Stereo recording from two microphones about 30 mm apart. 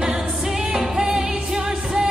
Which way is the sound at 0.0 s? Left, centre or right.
Centre.